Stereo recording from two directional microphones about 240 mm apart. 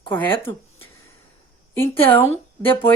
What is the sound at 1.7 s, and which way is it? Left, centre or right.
Speech, centre.